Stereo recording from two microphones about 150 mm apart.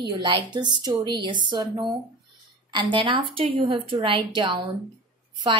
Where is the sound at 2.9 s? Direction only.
35° right (ahead or behind).